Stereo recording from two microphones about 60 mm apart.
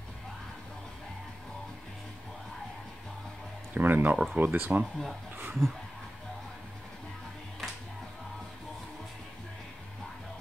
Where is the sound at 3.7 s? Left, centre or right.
Right.